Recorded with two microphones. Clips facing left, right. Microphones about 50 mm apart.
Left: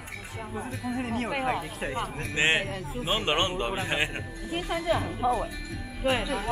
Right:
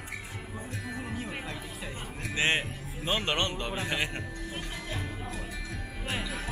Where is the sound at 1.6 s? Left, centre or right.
Left.